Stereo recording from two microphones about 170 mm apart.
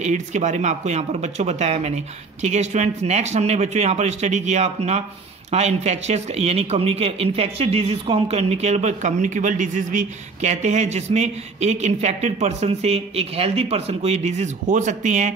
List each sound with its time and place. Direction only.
0.0 s speech: 45° right (ahead or behind)